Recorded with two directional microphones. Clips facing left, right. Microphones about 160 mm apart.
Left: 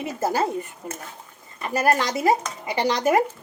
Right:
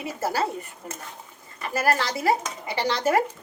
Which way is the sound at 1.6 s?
20° left (ahead or behind).